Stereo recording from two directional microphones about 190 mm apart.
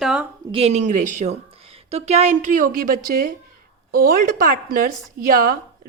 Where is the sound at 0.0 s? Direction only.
5° right (ahead or behind).